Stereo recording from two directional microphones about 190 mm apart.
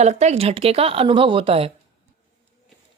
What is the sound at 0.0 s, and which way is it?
A woman's voice, 35° right (ahead or behind).